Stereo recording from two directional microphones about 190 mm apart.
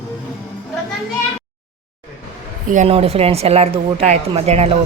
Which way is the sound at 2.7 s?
35° right (ahead or behind).